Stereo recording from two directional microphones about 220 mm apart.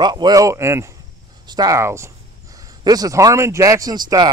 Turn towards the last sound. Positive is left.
turn(degrees=-20)  # may be behind; listen again after turning